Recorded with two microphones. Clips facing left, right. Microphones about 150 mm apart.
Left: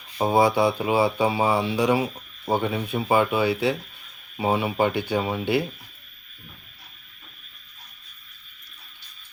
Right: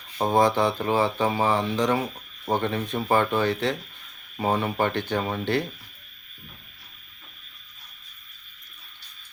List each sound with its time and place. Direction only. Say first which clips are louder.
0.2 s speech: left 1 dB; 10° left (ahead or behind)